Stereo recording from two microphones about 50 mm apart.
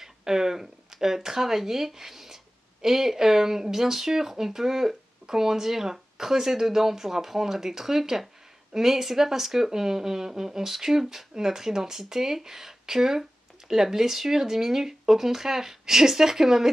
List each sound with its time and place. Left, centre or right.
0.0 s speech: centre